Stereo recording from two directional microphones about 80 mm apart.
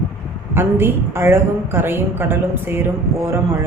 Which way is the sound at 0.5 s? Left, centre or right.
Right.